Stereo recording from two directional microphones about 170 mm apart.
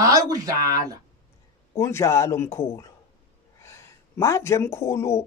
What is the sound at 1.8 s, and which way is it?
Speech, 15° left (ahead or behind).